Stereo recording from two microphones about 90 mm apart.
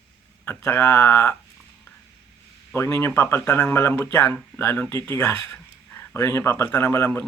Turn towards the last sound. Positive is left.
turn(degrees=25)  # may be behind; listen again after turning